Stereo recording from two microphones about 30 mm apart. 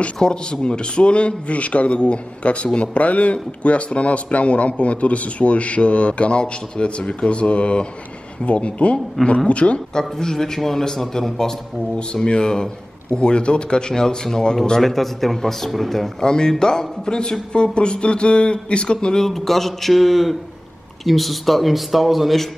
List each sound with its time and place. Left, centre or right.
0.2 s a man's voice: left
9.2 s speech: centre
9.5 s a man's voice: left
9.9 s a man's voice: centre
12.3 s speech: left
14.8 s a man's voice: centre
16.2 s a man's voice: left
19.1 s a man's voice: centre